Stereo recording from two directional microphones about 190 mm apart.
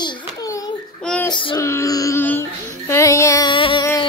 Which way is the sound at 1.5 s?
15° left (ahead or behind).